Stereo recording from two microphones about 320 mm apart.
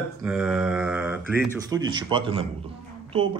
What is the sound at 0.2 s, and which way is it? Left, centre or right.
A woman's voice, centre.